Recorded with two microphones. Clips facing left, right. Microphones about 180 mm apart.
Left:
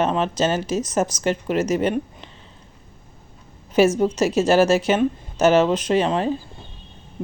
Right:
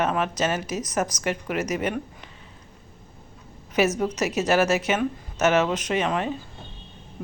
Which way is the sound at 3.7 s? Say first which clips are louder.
Left 6 dB; 30° left (ahead or behind).